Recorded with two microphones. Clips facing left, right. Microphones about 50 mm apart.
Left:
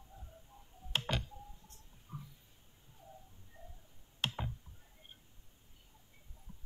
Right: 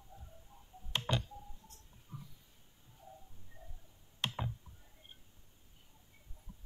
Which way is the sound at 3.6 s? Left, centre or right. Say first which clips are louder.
Left 2 dB; left.